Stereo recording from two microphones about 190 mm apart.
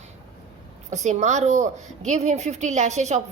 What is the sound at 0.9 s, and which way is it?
A woman's voice, 40° right (ahead or behind).